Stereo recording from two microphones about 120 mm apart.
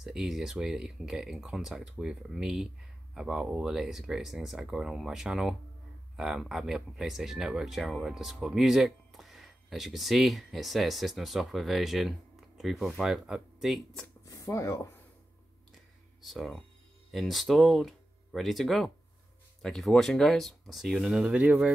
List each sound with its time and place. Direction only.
0.0 s speech: 5° right (ahead or behind)
14.2 s speech: 30° left (ahead or behind)
16.2 s speech: centre (ahead or behind)